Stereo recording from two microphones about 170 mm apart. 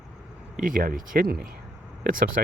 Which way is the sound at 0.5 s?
50° right (ahead or behind).